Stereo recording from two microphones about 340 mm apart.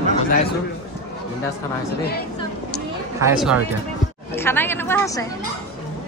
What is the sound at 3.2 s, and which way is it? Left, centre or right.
A man's voice, centre.